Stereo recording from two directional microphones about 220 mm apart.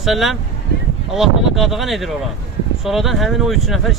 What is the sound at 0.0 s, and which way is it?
Speech, centre (ahead or behind).